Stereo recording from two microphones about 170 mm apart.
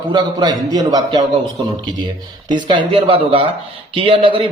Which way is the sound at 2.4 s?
25° right (ahead or behind).